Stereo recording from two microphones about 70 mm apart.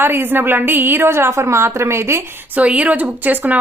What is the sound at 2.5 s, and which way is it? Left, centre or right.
Speech, right.